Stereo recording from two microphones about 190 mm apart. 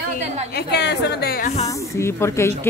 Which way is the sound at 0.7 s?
60° left (ahead or behind).